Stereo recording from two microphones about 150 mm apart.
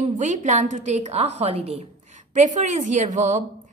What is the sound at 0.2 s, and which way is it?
A woman's voice, 55° right (ahead or behind).